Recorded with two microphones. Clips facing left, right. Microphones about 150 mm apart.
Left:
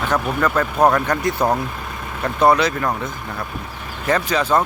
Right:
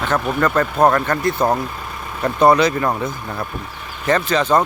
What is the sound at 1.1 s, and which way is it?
Speech, 15° left (ahead or behind).